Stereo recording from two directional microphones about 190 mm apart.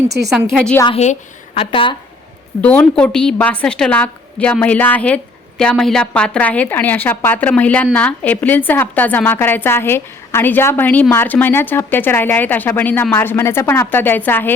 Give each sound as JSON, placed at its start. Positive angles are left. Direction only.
{"t": 0.3, "sound": "a woman's voice", "side_deg": 0}
{"t": 1.5, "sound": "a woman's voice", "side_deg": 25}
{"t": 2.6, "sound": "a woman's voice", "side_deg": 10}